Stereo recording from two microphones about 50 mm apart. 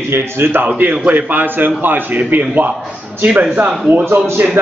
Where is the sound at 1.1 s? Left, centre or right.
Right.